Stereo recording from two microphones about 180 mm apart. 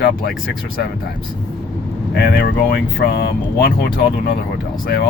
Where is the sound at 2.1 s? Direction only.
60° left (ahead or behind).